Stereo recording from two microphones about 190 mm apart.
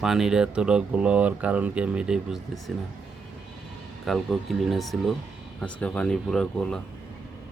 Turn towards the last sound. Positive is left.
turn(degrees=5)  # may be behind; listen again after turning